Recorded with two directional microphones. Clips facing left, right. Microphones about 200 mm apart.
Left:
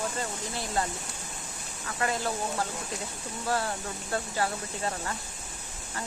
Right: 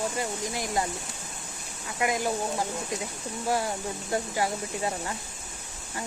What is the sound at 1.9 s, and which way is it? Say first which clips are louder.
Speech: right 3 dB; 15° right (ahead or behind).